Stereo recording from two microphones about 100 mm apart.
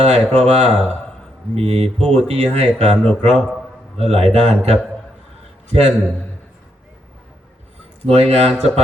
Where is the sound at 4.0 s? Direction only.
90° right.